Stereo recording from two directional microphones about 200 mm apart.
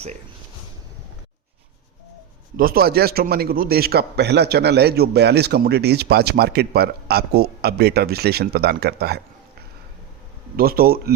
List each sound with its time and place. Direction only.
2.6 s a man's voice: 45° right (ahead or behind)
10.6 s a man's voice: 50° right (ahead or behind)